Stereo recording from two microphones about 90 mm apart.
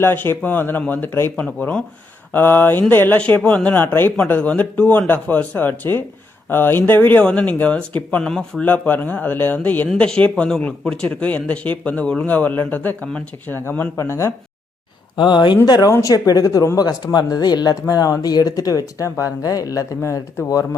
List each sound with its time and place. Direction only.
0.0 s speech: 25° left (ahead or behind)
3.2 s speech: 15° left (ahead or behind)
8.6 s speech: 20° left (ahead or behind)
13.9 s speech: 30° left (ahead or behind)
15.1 s speech: 60° left (ahead or behind)
15.6 s speech: 50° left (ahead or behind)